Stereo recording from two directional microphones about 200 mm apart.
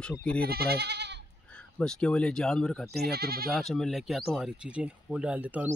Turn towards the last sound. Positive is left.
turn(degrees=-10)  # may be behind; listen again after turning